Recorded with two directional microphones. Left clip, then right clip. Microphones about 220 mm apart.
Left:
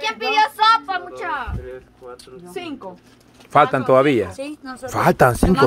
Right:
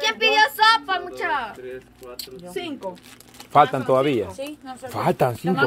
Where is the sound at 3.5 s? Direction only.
20° left (ahead or behind).